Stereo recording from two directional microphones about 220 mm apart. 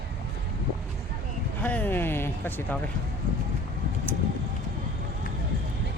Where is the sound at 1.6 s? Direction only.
10° left (ahead or behind).